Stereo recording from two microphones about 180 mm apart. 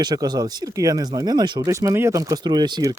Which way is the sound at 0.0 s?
20° right (ahead or behind).